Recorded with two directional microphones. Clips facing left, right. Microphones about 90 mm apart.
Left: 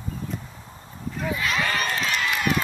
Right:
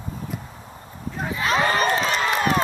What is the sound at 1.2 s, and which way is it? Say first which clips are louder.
Run: right 4 dB; 30° right (ahead or behind).